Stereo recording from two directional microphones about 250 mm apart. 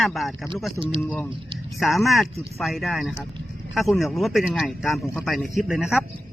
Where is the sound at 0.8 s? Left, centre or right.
Right.